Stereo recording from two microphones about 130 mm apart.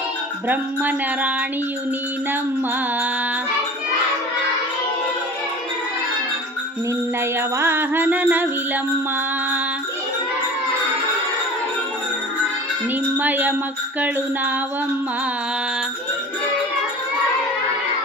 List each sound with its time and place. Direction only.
0.4 s music: 15° right (ahead or behind)
7.3 s music: 15° right (ahead or behind)
13.1 s music: 15° right (ahead or behind)